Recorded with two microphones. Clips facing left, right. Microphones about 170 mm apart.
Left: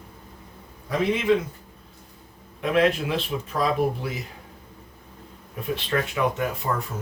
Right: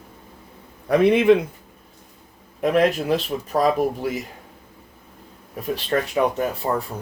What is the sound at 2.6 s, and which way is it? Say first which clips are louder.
Speech: right 3 dB; 40° right (ahead or behind).